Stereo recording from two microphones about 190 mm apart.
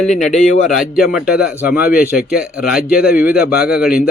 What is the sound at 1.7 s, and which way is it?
Speech, 55° left (ahead or behind).